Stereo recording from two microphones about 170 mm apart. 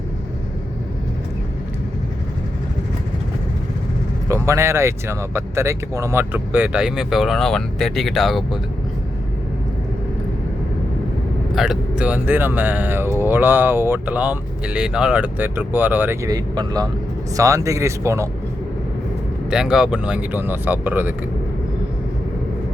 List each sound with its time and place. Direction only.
4.3 s speech: 15° right (ahead or behind); by 8.5 s centre (ahead or behind)
11.5 s speech: 5° right (ahead or behind)
19.5 s speech: 5° right (ahead or behind)